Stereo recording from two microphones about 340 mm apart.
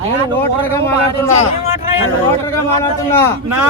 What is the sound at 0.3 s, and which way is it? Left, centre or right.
Speech, centre.